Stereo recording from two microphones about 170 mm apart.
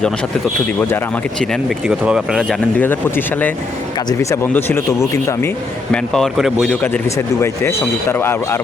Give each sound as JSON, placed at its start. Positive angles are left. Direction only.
{"t": 0.8, "sound": "speech", "side_deg": 10}
{"t": 1.9, "sound": "speech", "side_deg": -5}
{"t": 5.9, "sound": "speech", "side_deg": 0}